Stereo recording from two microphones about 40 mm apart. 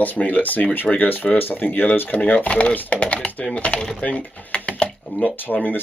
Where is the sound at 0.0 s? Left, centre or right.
Left.